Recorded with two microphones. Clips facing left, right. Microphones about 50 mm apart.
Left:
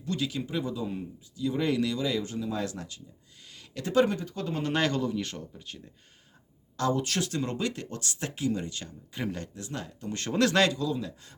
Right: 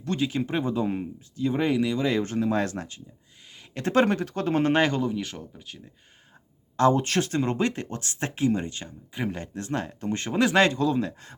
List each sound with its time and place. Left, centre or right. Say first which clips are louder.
0.2 s speech: right 5 dB; right
1.6 s speech: right 3 dB; right
2.0 s speech: right 5 dB; right
4.7 s speech: right 4 dB; right
5.2 s speech: right 1 dB; centre
6.7 s speech: right 7 dB; right
9.1 s speech: right 3 dB; centre
9.6 s speech: right 8 dB; right
10.2 s speech: right 2 dB; centre
10.6 s speech: right 5 dB; right